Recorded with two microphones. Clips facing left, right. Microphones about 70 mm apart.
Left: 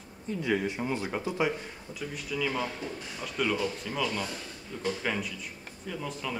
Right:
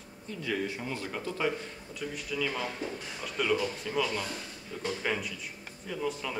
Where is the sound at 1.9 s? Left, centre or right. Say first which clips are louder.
Left 1 dB; centre.